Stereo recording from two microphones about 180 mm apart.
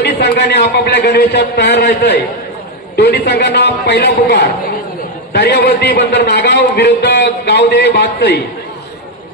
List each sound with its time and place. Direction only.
0.0 s a man's voice: 70° left (ahead or behind)